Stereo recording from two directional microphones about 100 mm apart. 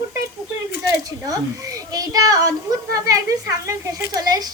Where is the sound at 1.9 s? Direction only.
40° right (ahead or behind).